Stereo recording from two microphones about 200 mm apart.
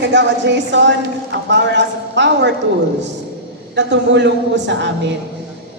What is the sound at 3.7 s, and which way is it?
A woman's voice, 60° right (ahead or behind).